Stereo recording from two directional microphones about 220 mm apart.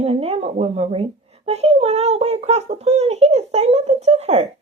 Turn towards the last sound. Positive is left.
turn(degrees=-30)  # may be behind; listen again after turning